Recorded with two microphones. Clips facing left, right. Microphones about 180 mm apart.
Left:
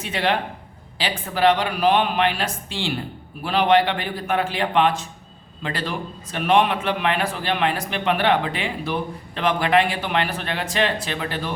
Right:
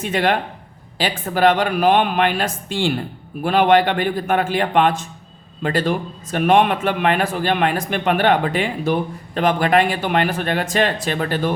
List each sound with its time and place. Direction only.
0.0 s a man's voice: 50° right (ahead or behind)